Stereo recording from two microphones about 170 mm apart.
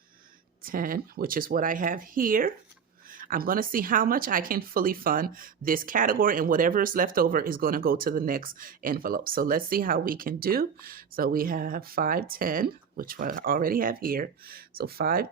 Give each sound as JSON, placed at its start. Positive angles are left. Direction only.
{"t": 0.6, "sound": "speech", "side_deg": -55}